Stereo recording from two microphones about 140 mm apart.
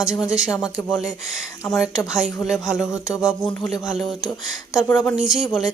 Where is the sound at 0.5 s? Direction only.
25° left (ahead or behind).